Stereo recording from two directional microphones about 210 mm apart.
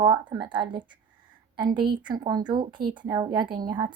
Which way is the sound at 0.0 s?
20° right (ahead or behind).